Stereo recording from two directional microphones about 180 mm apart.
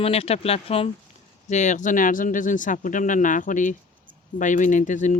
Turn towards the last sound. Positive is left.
turn(degrees=45)  # may be behind; listen again after turning